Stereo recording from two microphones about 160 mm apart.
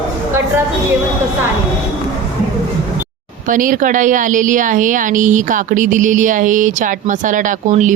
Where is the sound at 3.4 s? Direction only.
55° right (ahead or behind).